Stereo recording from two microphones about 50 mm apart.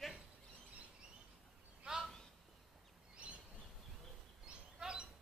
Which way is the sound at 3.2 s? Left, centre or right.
Right.